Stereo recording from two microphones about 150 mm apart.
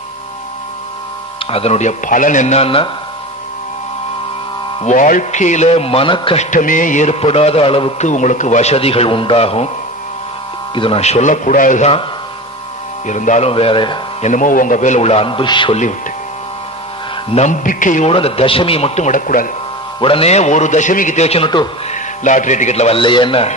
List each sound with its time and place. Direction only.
1.5 s a man's voice: 45° left (ahead or behind)
4.8 s a man's voice: 60° left (ahead or behind); by 6.4 s 35° left (ahead or behind)
6.5 s a man's voice: 60° left (ahead or behind); by 7.9 s 35° left (ahead or behind)
8.0 s a man's voice: 55° left (ahead or behind)
10.7 s a man's voice: 35° left (ahead or behind); by 11.9 s 60° left (ahead or behind)
13.0 s a man's voice: 55° left (ahead or behind); by 13.9 s 35° left (ahead or behind)
14.2 s a man's voice: 60° left (ahead or behind); by 15.7 s 35° left (ahead or behind)
17.3 s a man's voice: 50° left (ahead or behind)
18.1 s a man's voice: 40° left (ahead or behind); by 19.5 s 65° left (ahead or behind)
20.0 s a man's voice: 40° left (ahead or behind)
21.9 s a man's voice: 55° left (ahead or behind); by 23.5 s 35° left (ahead or behind)